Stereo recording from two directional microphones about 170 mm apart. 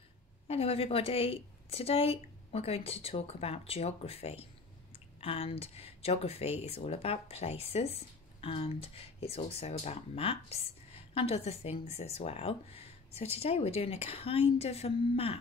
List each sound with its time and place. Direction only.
0.5 s speech: 35° left (ahead or behind)